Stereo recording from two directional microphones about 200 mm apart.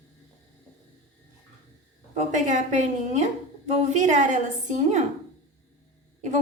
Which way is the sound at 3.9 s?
35° right (ahead or behind).